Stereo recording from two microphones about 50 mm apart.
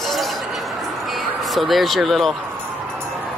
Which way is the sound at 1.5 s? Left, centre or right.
Centre.